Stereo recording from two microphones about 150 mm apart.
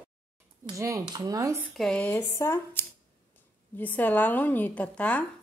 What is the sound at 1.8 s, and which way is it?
A woman's voice, 5° left (ahead or behind).